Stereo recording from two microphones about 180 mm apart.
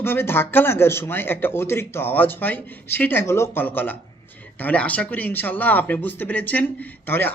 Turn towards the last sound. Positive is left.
turn(degrees=10)  # may be behind; listen again after turning